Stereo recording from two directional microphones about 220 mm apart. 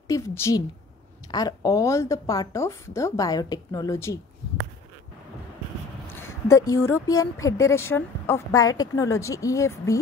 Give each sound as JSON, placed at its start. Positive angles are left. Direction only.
{"t": 0.1, "sound": "a woman's voice", "side_deg": 10}
{"t": 6.1, "sound": "a woman's voice", "side_deg": 10}